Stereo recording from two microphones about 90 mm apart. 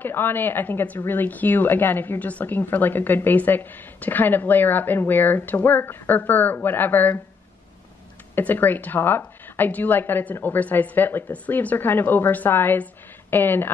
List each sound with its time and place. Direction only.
0.0 s a woman's voice: 25° left (ahead or behind)
8.4 s a woman's voice: 20° left (ahead or behind)